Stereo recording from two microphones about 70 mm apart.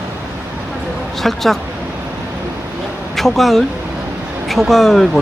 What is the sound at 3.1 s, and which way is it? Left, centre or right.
Speech, centre.